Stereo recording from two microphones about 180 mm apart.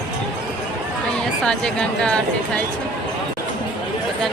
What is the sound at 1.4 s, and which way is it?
Speech, 5° left (ahead or behind).